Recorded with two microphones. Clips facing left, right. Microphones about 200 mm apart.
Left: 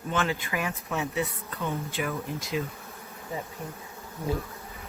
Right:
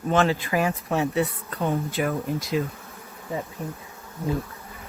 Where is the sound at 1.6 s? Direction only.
50° right (ahead or behind).